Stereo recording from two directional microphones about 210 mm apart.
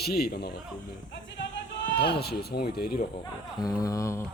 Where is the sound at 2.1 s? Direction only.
50° left (ahead or behind).